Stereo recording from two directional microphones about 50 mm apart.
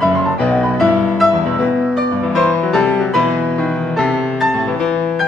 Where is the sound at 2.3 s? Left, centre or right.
Centre.